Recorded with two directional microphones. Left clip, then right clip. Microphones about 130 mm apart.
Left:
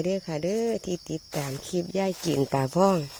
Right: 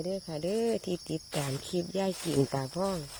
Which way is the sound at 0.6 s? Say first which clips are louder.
Left 3 dB; 10° left (ahead or behind).